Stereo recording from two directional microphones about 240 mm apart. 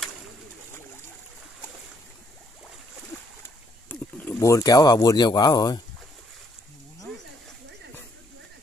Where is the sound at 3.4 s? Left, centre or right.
Centre.